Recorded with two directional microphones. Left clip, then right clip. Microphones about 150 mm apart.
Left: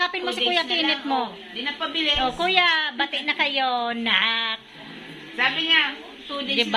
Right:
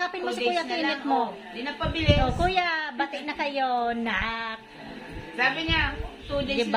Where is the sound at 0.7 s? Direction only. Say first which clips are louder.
Left 5 dB; 45° left (ahead or behind).